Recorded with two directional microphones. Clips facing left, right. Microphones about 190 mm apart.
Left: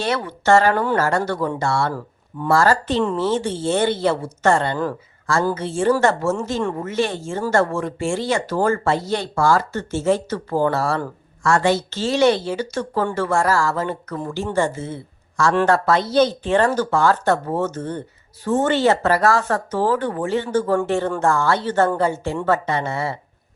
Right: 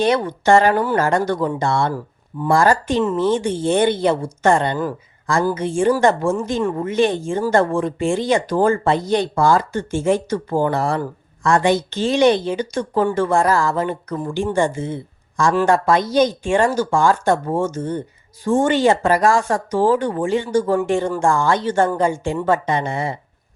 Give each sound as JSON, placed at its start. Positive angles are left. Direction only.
{"t": 0.0, "sound": "speech", "side_deg": -15}